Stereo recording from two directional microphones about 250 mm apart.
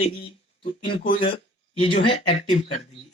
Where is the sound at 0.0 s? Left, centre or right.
Left.